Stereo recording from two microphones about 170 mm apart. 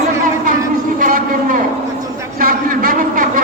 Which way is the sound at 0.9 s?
55° right (ahead or behind).